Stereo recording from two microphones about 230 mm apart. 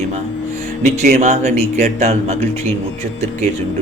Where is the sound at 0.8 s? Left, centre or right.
Right.